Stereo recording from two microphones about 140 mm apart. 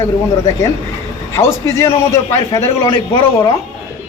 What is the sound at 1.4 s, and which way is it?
A man's voice, 20° left (ahead or behind).